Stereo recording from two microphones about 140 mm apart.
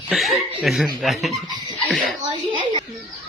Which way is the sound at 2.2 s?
40° right (ahead or behind).